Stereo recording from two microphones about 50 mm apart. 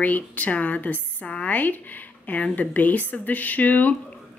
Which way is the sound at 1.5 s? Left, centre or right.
Left.